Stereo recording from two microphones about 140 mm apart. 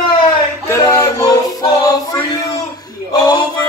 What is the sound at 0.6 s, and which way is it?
Music, 20° left (ahead or behind).